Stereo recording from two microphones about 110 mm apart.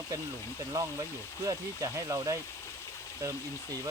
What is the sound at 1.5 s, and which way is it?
Speech, 30° right (ahead or behind).